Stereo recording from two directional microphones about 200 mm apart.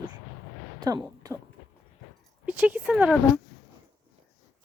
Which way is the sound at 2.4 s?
5° right (ahead or behind).